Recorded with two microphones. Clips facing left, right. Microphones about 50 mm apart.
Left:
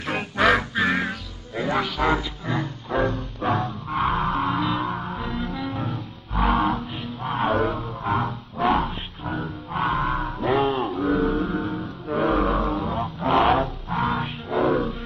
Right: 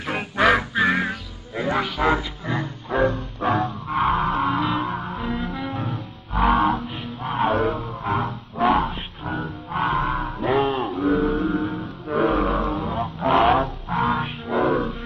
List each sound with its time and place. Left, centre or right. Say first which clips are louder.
0.0 s music: right 1 dB; centre
2.4 s music: even; right
3.4 s music: right 2 dB; centre
7.6 s wild animals: right 1 dB; centre